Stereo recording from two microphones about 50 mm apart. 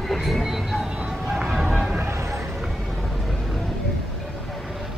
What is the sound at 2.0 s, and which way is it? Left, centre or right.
Vehicle, right.